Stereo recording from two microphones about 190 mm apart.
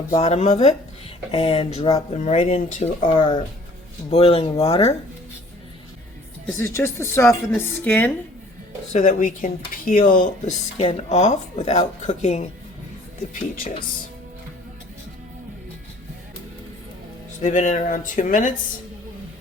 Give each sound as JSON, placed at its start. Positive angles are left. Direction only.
{"t": 0.1, "sound": "speech", "side_deg": 35}
{"t": 6.6, "sound": "speech", "side_deg": 15}
{"t": 8.9, "sound": "speech", "side_deg": 40}
{"t": 17.4, "sound": "speech", "side_deg": 40}